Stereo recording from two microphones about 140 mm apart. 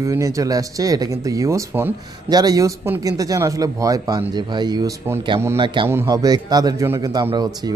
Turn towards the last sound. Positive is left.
turn(degrees=-30)  # may be behind; listen again after turning